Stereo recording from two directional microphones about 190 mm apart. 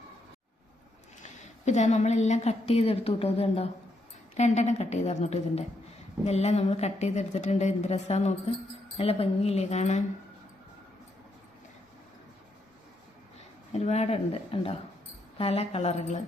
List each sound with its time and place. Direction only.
1.2 s a woman's voice: 40° left (ahead or behind)
13.7 s a woman's voice: 35° left (ahead or behind)